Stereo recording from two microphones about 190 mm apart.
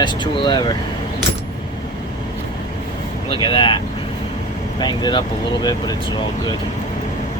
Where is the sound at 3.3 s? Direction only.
25° left (ahead or behind).